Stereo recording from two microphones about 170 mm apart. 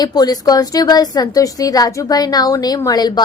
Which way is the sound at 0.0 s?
25° left (ahead or behind).